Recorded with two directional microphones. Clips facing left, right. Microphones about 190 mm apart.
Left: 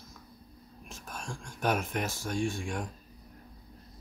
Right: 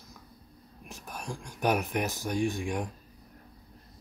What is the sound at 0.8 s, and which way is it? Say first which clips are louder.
Speech: right 2 dB; 15° right (ahead or behind).